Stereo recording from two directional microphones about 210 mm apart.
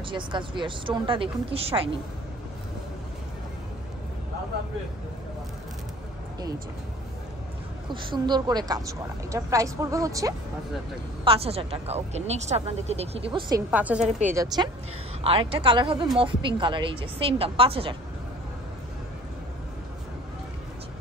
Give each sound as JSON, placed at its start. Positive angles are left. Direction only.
{"t": 0.1, "sound": "speech", "side_deg": -25}
{"t": 7.9, "sound": "a woman's voice", "side_deg": -20}
{"t": 11.2, "sound": "speech", "side_deg": -30}
{"t": 13.7, "sound": "a woman's voice", "side_deg": -5}
{"t": 14.3, "sound": "a woman's voice", "side_deg": -20}